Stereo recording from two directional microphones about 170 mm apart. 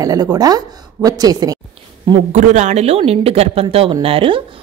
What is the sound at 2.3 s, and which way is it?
Speech, 45° right (ahead or behind).